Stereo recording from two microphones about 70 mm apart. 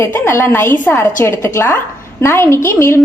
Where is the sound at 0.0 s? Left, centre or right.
Left.